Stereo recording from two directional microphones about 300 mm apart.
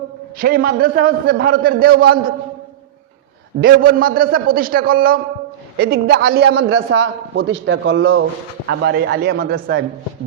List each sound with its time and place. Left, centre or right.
0.3 s a man's voice: right
3.6 s a man's voice: right